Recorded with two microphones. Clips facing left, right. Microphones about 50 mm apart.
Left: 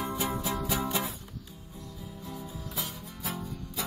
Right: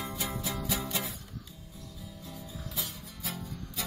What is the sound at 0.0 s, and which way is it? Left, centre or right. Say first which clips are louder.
Music: left 4 dB; left.